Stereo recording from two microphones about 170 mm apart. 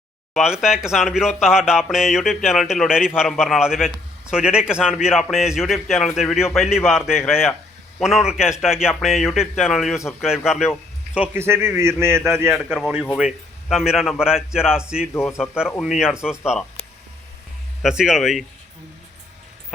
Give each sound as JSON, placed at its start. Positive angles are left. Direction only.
{"t": 0.3, "sound": "a man's voice", "side_deg": -5}
{"t": 12.5, "sound": "a man's voice", "side_deg": 0}
{"t": 15.1, "sound": "speech", "side_deg": 15}
{"t": 15.4, "sound": "a man's voice", "side_deg": -5}
{"t": 17.8, "sound": "a man's voice", "side_deg": -5}